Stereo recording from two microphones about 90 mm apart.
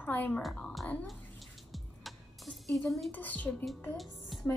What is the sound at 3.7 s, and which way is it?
Speech, centre (ahead or behind).